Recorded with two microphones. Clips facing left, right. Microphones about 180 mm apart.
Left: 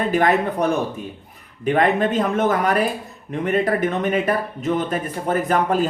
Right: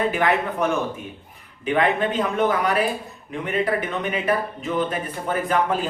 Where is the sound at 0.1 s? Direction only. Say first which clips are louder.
Left 4 dB; 40° left (ahead or behind).